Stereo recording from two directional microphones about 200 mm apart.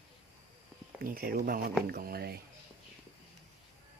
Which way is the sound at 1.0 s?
45° right (ahead or behind).